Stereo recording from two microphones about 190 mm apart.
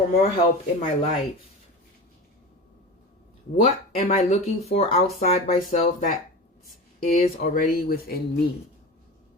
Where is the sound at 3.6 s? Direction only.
35° left (ahead or behind); by 8.2 s 50° left (ahead or behind).